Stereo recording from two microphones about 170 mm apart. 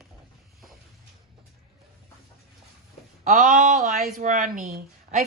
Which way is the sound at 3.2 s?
50° right (ahead or behind).